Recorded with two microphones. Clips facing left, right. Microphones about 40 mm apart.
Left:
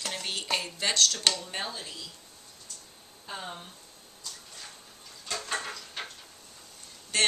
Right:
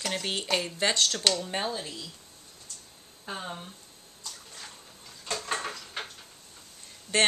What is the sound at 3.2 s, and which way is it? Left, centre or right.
Speech, centre.